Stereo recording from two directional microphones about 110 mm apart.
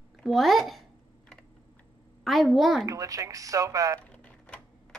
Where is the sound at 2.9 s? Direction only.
30° right (ahead or behind).